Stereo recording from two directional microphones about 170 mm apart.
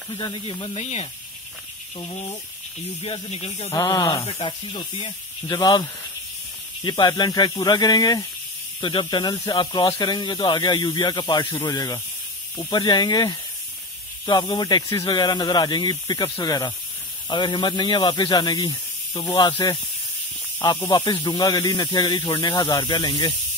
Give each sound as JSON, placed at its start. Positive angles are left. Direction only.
{"t": 0.2, "sound": "speech", "side_deg": 30}
{"t": 3.0, "sound": "speech", "side_deg": 35}
{"t": 3.7, "sound": "speech", "side_deg": 20}